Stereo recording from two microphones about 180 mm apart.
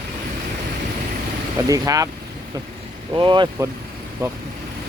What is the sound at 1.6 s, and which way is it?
Speech, 20° right (ahead or behind).